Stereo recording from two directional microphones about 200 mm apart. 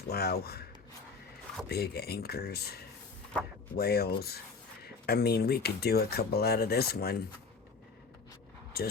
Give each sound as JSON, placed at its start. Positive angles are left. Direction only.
{"t": 0.1, "sound": "speech", "side_deg": 50}
{"t": 1.6, "sound": "speech", "side_deg": 50}
{"t": 8.7, "sound": "speech", "side_deg": 50}